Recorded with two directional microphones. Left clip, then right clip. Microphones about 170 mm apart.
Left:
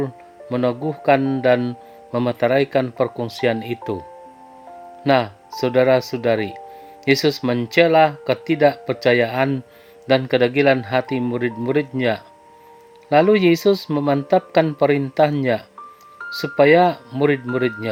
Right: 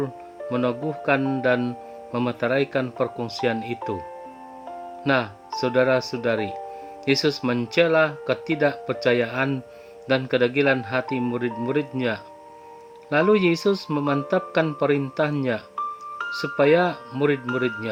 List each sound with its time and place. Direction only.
0.5 s speech: 20° left (ahead or behind)
5.0 s speech: 20° left (ahead or behind)